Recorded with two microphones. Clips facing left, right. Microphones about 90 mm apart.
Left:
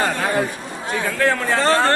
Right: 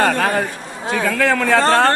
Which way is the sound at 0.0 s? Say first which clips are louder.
Right 3 dB; 60° right (ahead or behind).